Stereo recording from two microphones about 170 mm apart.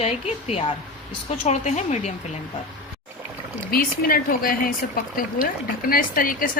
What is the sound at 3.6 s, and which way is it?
Speech, 60° left (ahead or behind).